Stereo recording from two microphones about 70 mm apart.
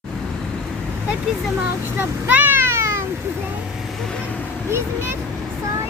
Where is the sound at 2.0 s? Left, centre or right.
Right.